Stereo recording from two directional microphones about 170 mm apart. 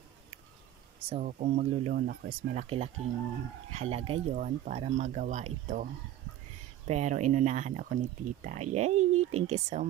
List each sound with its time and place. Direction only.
1.1 s speech: 45° right (ahead or behind)
2.0 s speech: 65° right (ahead or behind)
2.6 s speech: 35° right (ahead or behind)
6.9 s speech: 45° right (ahead or behind)